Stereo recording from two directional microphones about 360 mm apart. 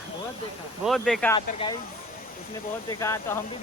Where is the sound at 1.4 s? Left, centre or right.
Centre.